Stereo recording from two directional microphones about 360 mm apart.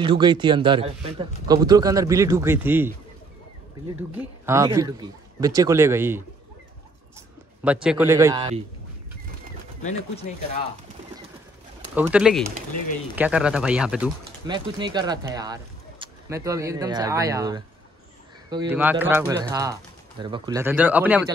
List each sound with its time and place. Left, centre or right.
0.0 s speech: centre
4.1 s a man's voice: centre
9.8 s speech: centre
11.9 s speech: centre